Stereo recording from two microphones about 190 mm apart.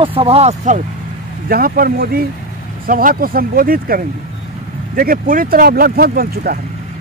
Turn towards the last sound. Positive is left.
turn(degrees=-50)  # may be behind; listen again after turning